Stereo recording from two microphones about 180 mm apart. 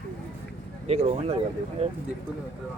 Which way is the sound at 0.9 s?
35° right (ahead or behind).